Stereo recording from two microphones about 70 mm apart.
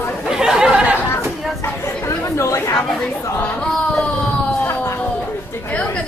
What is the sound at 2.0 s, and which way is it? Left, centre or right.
Chatter, left.